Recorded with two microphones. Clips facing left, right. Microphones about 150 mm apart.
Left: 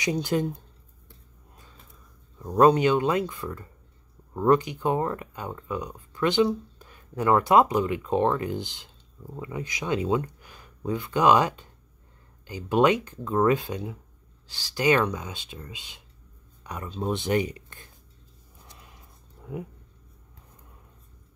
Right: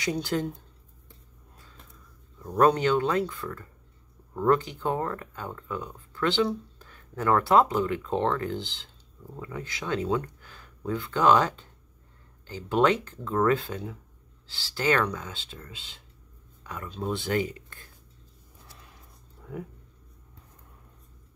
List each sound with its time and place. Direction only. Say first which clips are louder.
0.0 s speech: left 3 dB; 20° left (ahead or behind)
2.3 s speech: left 3 dB; 15° left (ahead or behind)
19.4 s speech: left 3 dB; 20° left (ahead or behind)